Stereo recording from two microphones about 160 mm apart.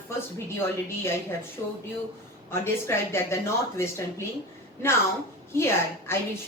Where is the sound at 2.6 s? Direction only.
15° left (ahead or behind).